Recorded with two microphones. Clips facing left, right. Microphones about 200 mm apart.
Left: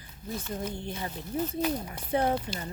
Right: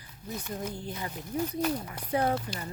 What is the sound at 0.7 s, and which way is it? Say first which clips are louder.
Speech: left 1 dB; 25° left (ahead or behind).